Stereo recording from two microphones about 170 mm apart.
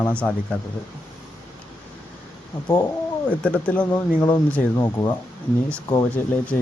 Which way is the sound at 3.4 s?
10° left (ahead or behind).